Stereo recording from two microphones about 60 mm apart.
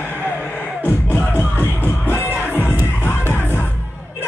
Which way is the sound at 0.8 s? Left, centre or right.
Left.